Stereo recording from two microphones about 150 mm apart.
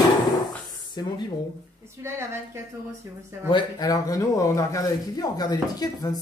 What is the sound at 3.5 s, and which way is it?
Speech, 25° left (ahead or behind).